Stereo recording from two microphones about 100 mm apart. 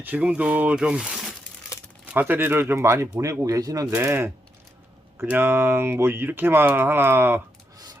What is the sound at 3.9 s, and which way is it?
Speech, 25° right (ahead or behind).